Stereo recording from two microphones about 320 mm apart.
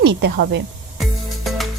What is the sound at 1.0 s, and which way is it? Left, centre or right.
Music, centre.